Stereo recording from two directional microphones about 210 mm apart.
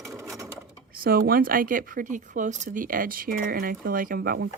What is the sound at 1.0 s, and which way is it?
Speech, 45° right (ahead or behind).